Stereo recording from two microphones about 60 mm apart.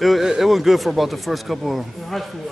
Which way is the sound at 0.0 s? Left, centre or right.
Centre.